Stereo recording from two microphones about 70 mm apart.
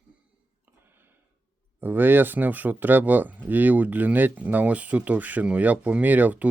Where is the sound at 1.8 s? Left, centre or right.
Right.